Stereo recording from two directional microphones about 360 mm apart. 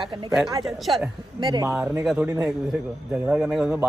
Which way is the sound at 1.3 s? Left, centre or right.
Centre.